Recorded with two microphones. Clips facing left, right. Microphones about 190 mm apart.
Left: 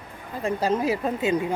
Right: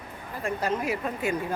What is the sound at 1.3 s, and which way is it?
Speech, 20° left (ahead or behind).